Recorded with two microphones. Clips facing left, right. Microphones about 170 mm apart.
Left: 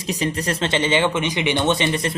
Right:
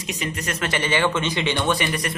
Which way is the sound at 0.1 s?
35° left (ahead or behind).